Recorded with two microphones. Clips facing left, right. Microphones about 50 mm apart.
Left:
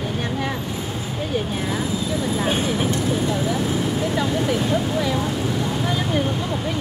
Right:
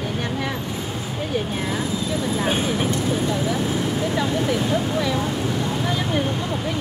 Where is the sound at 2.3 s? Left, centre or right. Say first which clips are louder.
Even; centre.